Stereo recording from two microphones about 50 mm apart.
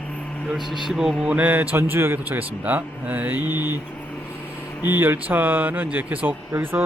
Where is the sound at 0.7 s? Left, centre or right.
Centre.